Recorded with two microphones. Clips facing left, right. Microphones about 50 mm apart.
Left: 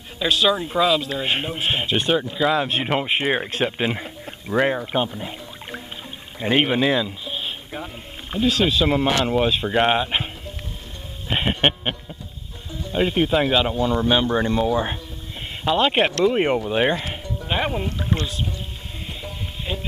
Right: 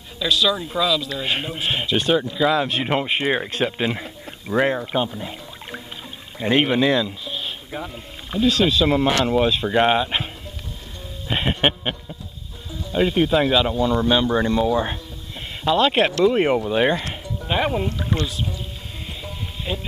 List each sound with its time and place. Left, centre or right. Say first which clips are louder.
0.2 s speech: left 1 dB; left; by 4.8 s centre
5.1 s a sound: even; centre
6.4 s speech: right 1 dB; centre
7.2 s a sound: even; centre
7.7 s speech: right 1 dB; centre
11.2 s music: even; centre
11.6 s a sound: even; centre
12.9 s speech: right 1 dB; centre
16.3 s speech: right 1 dB; centre
19.2 s music: right 2 dB; centre